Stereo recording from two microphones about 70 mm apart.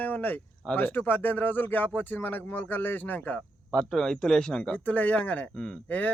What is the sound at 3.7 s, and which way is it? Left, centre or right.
Speech, centre.